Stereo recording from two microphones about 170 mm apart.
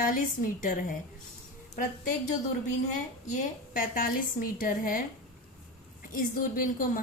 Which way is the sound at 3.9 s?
55° left (ahead or behind).